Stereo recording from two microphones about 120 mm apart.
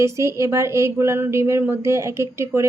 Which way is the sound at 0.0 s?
25° right (ahead or behind).